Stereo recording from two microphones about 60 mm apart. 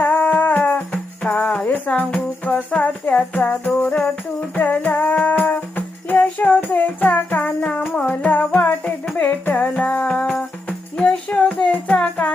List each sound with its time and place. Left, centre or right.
0.0 s music: left
1.2 s music: centre